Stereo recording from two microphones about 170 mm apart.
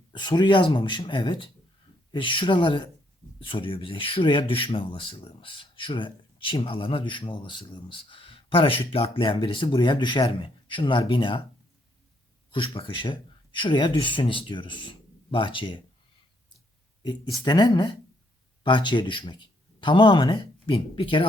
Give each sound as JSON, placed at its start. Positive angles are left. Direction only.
{"t": 0.1, "sound": "speech", "side_deg": 25}
{"t": 12.5, "sound": "speech", "side_deg": 30}
{"t": 17.0, "sound": "speech", "side_deg": 25}